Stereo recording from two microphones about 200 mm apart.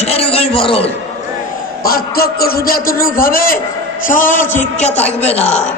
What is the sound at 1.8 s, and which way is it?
A man's voice, 50° left (ahead or behind).